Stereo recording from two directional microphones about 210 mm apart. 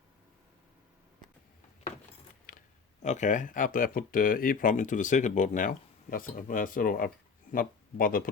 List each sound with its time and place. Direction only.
2.5 s speech: 35° left (ahead or behind)